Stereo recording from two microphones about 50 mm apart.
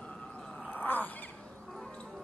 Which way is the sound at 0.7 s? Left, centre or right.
Left.